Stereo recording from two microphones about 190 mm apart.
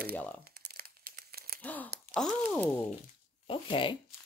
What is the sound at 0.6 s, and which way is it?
Crumpling, 50° right (ahead or behind).